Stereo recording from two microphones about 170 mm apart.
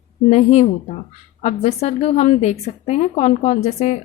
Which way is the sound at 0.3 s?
40° left (ahead or behind).